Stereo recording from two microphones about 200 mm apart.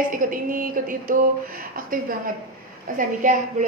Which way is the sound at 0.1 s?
45° right (ahead or behind).